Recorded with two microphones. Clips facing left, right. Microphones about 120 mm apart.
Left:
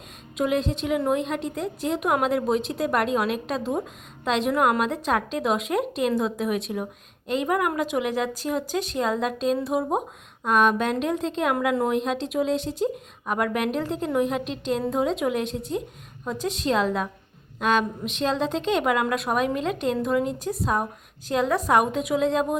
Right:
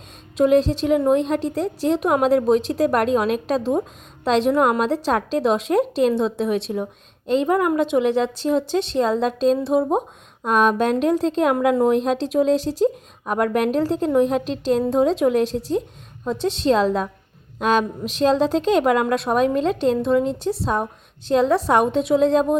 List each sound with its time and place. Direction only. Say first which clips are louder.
0.3 s a woman's voice: right 8 dB; 35° right (ahead or behind)